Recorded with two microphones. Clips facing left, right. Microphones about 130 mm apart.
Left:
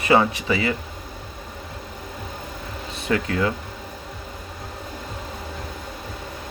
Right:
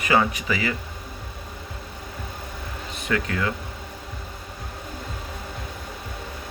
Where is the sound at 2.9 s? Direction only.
30° left (ahead or behind).